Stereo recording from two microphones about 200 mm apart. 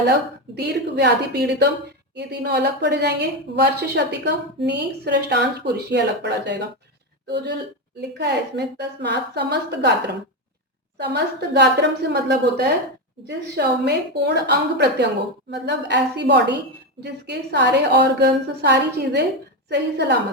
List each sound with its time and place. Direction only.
0.5 s a woman's voice: 55° right (ahead or behind)
8.2 s a woman's voice: 55° right (ahead or behind)
10.9 s a woman's voice: 55° right (ahead or behind)